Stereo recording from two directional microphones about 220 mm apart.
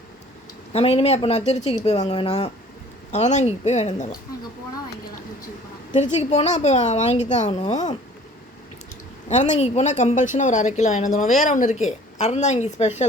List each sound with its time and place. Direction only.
0.7 s a woman's voice: 25° left (ahead or behind)
5.9 s a woman's voice: 30° left (ahead or behind)
9.3 s a woman's voice: 35° left (ahead or behind)